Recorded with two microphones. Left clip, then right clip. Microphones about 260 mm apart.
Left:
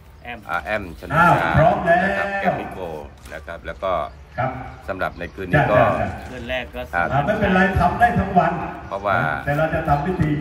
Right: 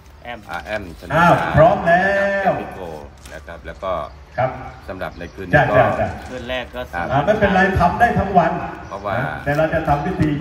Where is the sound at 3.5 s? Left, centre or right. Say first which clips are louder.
Left 1 dB; centre.